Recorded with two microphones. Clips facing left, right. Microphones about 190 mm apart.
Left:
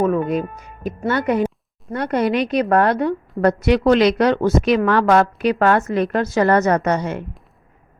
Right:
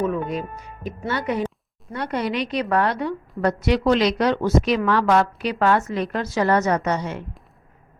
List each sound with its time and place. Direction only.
0.0 s music: 55° left (ahead or behind)
0.9 s a woman's voice: 50° left (ahead or behind)